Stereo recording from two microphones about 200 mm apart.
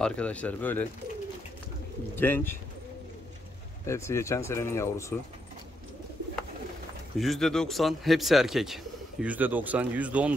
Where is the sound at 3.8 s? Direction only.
15° left (ahead or behind).